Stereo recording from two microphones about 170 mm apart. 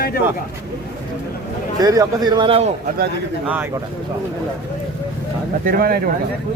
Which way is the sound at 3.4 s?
10° right (ahead or behind).